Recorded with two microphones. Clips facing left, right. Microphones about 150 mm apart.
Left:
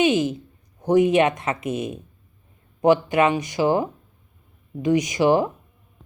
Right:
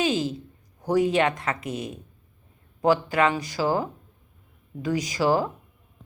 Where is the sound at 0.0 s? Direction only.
20° left (ahead or behind).